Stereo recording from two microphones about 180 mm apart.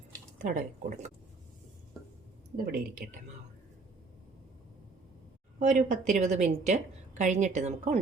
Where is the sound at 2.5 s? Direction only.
55° right (ahead or behind).